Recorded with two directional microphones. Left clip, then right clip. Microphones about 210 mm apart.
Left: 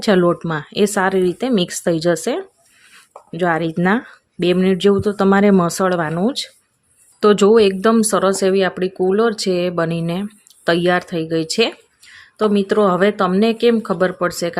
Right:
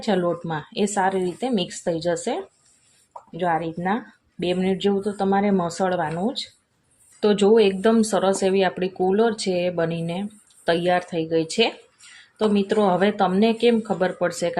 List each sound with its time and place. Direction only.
0.0 s speech: 45° left (ahead or behind)
12.5 s speech: 35° left (ahead or behind)